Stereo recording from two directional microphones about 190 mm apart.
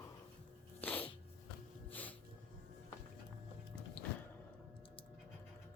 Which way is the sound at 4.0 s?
5° left (ahead or behind).